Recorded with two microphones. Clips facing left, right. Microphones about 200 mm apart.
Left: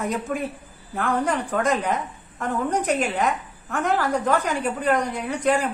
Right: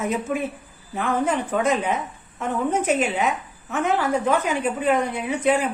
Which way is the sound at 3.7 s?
15° right (ahead or behind).